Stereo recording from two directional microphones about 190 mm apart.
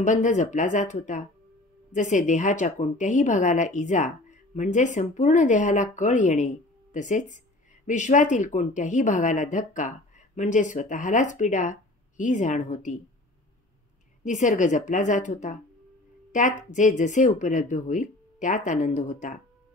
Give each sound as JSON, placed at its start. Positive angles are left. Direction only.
{"t": 0.0, "sound": "a woman's voice", "side_deg": 40}
{"t": 14.2, "sound": "a woman's voice", "side_deg": 40}